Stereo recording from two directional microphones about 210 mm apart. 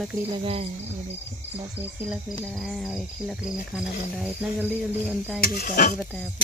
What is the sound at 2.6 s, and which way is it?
Cricket, centre (ahead or behind).